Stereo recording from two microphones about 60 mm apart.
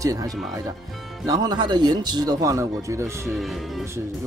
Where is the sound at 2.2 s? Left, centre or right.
Right.